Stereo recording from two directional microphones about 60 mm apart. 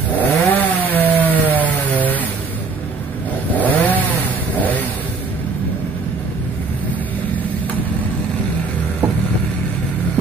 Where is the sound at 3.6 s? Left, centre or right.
Left.